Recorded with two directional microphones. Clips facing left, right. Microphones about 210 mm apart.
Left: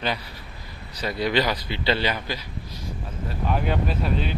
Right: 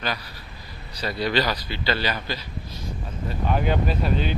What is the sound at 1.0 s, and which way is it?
A man's voice, 20° left (ahead or behind).